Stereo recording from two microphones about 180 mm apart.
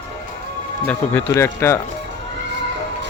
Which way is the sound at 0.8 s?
10° left (ahead or behind).